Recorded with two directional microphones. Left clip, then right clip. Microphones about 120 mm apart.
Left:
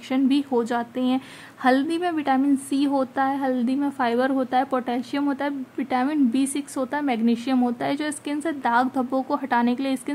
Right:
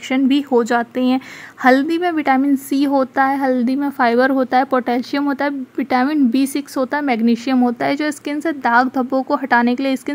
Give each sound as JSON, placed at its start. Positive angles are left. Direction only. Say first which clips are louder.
{"t": 0.1, "sound": "a woman's voice", "louder": "right 6 dB", "side_deg": -35}